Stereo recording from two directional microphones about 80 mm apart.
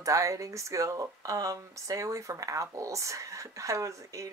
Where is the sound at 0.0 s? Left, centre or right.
Right.